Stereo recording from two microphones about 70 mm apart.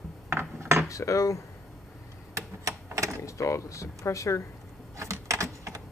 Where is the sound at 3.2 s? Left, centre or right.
Left.